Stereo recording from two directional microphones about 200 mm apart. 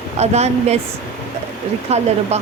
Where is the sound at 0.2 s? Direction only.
35° right (ahead or behind).